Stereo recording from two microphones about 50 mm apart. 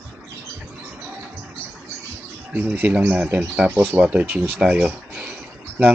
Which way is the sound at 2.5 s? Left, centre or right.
Right.